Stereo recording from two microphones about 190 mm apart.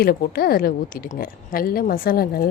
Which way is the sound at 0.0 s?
50° left (ahead or behind).